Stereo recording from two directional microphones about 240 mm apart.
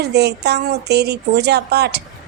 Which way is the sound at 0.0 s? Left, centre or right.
Right.